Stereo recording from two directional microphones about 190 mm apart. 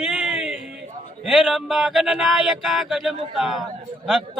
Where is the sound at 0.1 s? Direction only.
5° right (ahead or behind).